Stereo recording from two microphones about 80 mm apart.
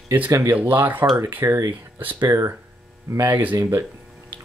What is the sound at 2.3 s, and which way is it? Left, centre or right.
Speech, right.